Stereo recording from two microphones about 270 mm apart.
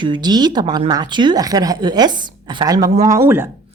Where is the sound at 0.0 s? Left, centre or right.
Centre.